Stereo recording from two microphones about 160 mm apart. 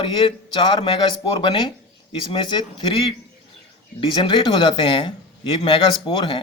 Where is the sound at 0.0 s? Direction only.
30° left (ahead or behind).